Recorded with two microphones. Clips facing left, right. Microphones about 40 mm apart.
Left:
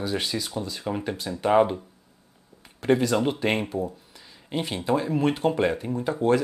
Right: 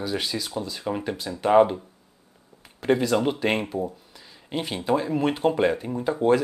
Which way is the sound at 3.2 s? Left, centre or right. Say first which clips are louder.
Right 1 dB; centre.